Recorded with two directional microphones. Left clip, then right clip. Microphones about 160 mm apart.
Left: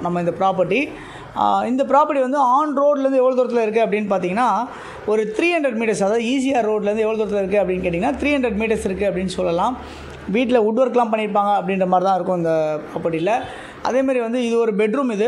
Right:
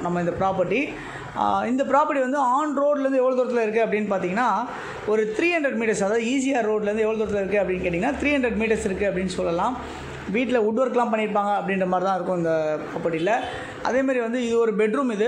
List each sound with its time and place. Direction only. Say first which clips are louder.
0.0 s a man's voice: left 4 dB; 40° left (ahead or behind)